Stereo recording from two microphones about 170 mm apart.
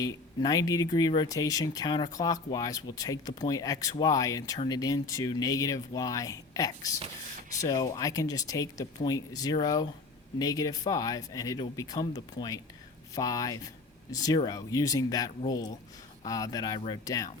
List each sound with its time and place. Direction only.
0.0 s speech: 20° left (ahead or behind)